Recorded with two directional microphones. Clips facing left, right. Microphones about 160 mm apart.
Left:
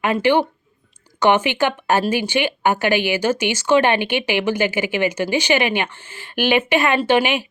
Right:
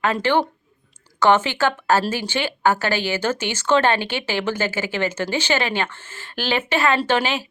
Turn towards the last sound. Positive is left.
turn(degrees=15)  # may be behind; listen again after turning